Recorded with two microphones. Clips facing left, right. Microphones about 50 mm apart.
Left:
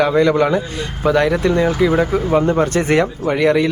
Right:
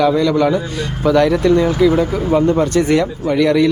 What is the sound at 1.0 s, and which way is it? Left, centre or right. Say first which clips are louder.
Speech: right 2 dB; centre.